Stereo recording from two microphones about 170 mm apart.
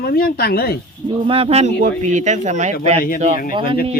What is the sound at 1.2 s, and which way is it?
Speech, 35° right (ahead or behind).